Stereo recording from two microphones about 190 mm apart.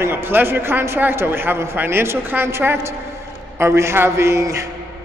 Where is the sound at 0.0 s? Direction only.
10° right (ahead or behind).